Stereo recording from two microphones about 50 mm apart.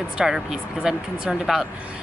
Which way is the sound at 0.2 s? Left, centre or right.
Centre.